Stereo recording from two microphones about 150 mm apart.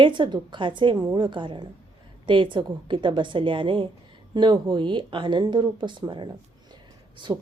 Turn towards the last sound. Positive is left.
turn(degrees=-25)  # may be behind; listen again after turning